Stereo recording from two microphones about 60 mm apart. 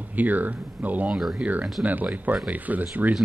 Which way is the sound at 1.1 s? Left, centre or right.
Centre.